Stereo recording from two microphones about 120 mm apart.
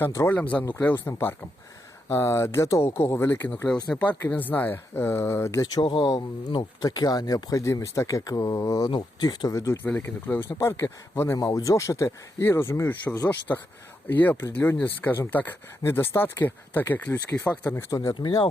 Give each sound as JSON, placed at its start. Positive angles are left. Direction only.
{"t": 0.0, "sound": "speech", "side_deg": 20}
{"t": 5.8, "sound": "speech", "side_deg": 45}
{"t": 18.1, "sound": "speech", "side_deg": 40}